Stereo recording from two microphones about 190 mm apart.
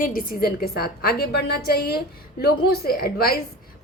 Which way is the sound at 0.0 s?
50° left (ahead or behind).